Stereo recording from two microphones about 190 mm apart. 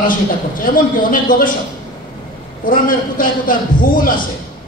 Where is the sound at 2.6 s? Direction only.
45° left (ahead or behind).